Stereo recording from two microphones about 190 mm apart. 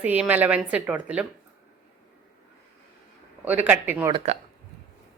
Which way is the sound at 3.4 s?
10° right (ahead or behind).